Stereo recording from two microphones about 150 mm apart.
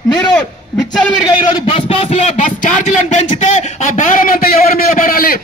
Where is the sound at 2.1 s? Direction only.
55° left (ahead or behind).